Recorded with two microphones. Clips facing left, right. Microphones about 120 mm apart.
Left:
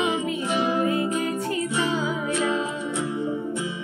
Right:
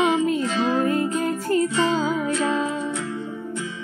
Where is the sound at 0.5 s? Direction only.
15° left (ahead or behind).